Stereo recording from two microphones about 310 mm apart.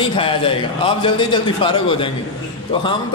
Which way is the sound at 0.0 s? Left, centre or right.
Centre.